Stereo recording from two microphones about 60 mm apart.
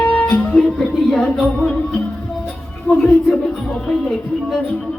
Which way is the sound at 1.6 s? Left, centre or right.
Centre.